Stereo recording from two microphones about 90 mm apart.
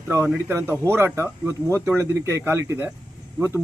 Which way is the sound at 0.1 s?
30° right (ahead or behind).